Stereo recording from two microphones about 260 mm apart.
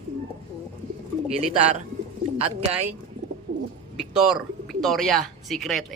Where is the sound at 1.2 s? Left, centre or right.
Right.